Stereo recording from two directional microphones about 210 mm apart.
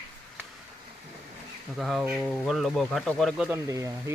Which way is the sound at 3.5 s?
15° right (ahead or behind).